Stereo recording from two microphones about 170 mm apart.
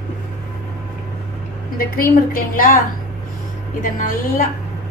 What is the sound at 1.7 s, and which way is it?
A woman's voice, 55° left (ahead or behind).